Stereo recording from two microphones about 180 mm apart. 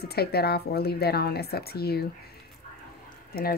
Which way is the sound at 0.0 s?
60° left (ahead or behind).